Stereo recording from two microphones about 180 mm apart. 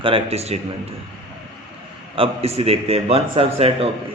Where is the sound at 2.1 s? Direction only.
30° right (ahead or behind).